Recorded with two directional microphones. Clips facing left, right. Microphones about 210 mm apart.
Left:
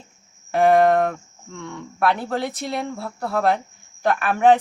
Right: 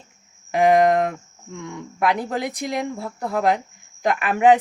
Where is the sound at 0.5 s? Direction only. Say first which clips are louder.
Even; 15° right (ahead or behind).